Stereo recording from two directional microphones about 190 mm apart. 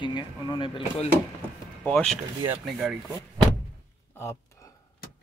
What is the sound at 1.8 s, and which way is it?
Speech, centre (ahead or behind).